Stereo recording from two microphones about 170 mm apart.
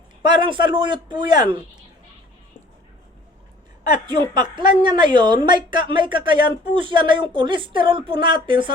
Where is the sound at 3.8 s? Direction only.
25° right (ahead or behind).